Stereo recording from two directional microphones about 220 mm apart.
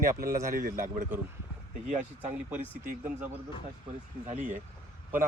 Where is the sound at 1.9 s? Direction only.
30° right (ahead or behind).